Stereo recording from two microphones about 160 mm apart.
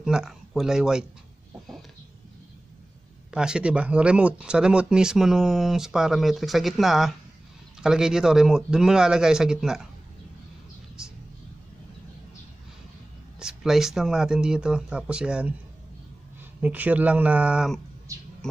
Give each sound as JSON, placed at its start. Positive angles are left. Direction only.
{"t": 0.0, "sound": "speech", "side_deg": -5}
{"t": 3.3, "sound": "speech", "side_deg": -5}
{"t": 11.0, "sound": "a sound", "side_deg": -5}
{"t": 13.4, "sound": "speech", "side_deg": -5}
{"t": 16.6, "sound": "speech", "side_deg": -10}
{"t": 18.1, "sound": "a sound", "side_deg": -20}